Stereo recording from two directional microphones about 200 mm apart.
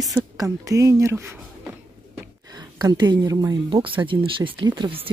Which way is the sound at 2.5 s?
20° right (ahead or behind).